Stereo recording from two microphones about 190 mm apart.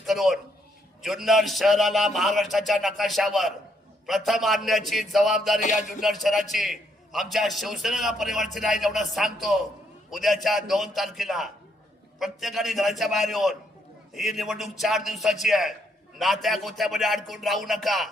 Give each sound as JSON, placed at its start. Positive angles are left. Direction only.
{"t": 0.0, "sound": "a sound", "side_deg": 0}
{"t": 1.0, "sound": "a man's voice", "side_deg": 0}
{"t": 5.5, "sound": "music", "side_deg": 40}
{"t": 6.0, "sound": "a man's voice", "side_deg": 0}